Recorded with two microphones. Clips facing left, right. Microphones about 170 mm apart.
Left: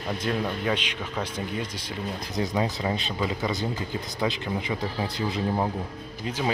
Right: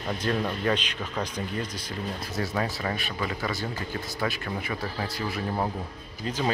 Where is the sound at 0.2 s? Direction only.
5° left (ahead or behind).